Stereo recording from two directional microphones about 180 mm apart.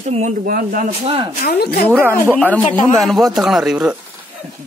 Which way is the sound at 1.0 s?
30° right (ahead or behind).